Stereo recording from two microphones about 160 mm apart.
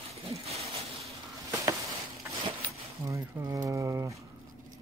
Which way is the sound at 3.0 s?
20° right (ahead or behind).